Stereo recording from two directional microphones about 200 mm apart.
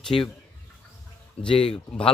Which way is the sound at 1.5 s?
25° left (ahead or behind).